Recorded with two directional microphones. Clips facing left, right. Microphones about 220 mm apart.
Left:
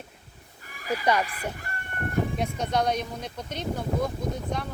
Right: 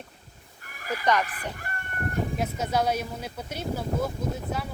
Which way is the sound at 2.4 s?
5° right (ahead or behind).